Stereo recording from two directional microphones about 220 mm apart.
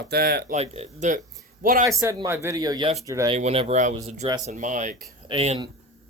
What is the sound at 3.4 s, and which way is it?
Speech, 30° right (ahead or behind).